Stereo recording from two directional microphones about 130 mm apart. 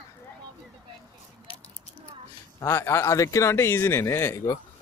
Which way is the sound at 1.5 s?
45° left (ahead or behind).